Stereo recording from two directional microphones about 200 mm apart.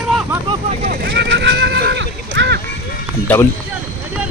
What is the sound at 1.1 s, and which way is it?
Neigh, 65° right (ahead or behind).